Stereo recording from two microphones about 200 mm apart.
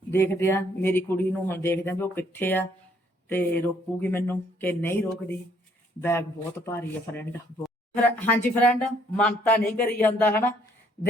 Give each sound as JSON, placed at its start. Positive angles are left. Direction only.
{"t": 0.1, "sound": "speech", "side_deg": 10}